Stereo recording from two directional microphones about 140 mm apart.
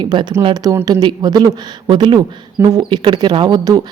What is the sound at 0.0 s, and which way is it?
Speech, 35° right (ahead or behind).